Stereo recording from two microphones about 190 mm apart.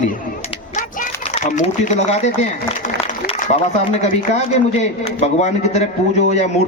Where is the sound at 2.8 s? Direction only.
40° left (ahead or behind).